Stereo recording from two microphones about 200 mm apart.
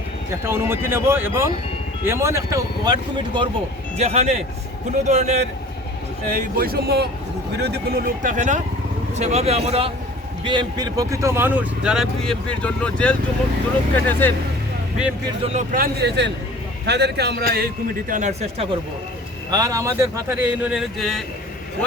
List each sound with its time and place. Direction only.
0.4 s speech: 10° right (ahead or behind)
3.9 s speech: 30° right (ahead or behind); by 14.3 s 10° left (ahead or behind)
15.5 s a man's voice: 45° right (ahead or behind)
18.1 s speech: 35° right (ahead or behind)
19.5 s speech: 15° right (ahead or behind); by 21.2 s centre (ahead or behind)